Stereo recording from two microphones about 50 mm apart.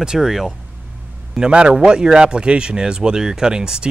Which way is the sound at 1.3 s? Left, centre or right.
Centre.